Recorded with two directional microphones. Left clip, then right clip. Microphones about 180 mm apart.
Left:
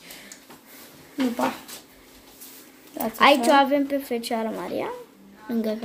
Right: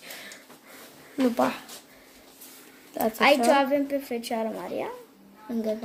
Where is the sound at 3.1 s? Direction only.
10° left (ahead or behind).